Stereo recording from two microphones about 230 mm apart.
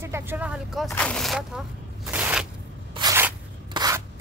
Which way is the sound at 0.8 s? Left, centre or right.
Centre.